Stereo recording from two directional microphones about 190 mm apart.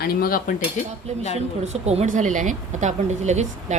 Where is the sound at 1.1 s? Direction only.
35° right (ahead or behind).